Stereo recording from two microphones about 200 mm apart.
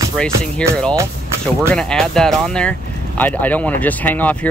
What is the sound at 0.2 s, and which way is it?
Speech, 5° left (ahead or behind).